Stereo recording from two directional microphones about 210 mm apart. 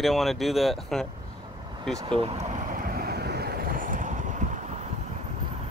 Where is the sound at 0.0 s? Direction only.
Centre (ahead or behind).